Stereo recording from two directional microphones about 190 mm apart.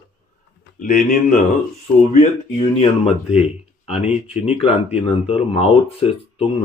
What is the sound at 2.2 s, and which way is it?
Speech, 30° left (ahead or behind).